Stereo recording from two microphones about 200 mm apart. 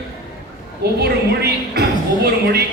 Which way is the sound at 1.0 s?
50° right (ahead or behind).